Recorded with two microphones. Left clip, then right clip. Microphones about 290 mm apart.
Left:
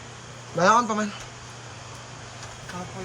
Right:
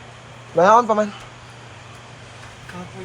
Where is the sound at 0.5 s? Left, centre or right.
Centre.